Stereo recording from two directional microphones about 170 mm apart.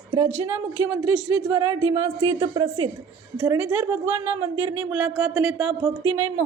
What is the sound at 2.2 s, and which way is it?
Speech, 30° right (ahead or behind).